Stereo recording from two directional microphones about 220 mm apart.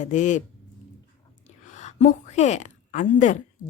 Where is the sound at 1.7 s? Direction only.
30° left (ahead or behind).